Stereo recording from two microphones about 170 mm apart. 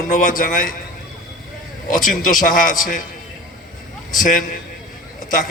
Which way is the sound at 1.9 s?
50° left (ahead or behind).